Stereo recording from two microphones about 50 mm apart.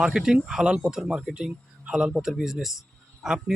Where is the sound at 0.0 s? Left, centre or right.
Centre.